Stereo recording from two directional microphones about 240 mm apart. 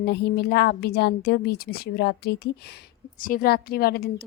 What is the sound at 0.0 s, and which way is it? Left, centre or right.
A woman's voice, left.